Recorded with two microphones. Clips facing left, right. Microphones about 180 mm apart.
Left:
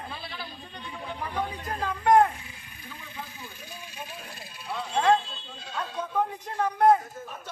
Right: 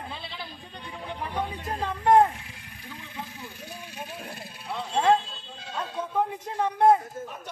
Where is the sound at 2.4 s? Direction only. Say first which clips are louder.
Right 1 dB; 75° right (ahead or behind).